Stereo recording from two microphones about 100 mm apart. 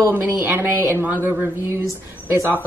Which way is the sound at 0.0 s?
20° right (ahead or behind).